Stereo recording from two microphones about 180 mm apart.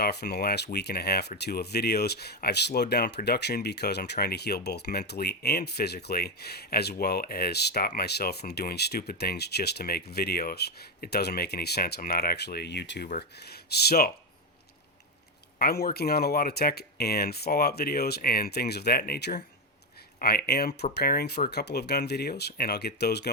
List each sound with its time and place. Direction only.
0.0 s speech: 65° left (ahead or behind)
15.5 s speech: 60° left (ahead or behind)